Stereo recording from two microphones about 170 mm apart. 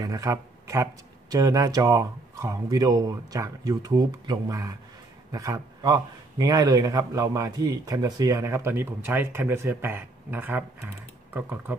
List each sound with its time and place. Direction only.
0.0 s a man's voice: 20° right (ahead or behind)